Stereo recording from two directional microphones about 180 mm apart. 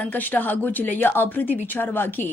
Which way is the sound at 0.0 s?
10° left (ahead or behind).